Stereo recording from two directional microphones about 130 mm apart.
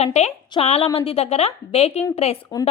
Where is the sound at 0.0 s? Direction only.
55° left (ahead or behind).